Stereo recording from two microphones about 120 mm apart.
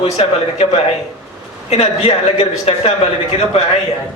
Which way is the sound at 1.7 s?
60° left (ahead or behind).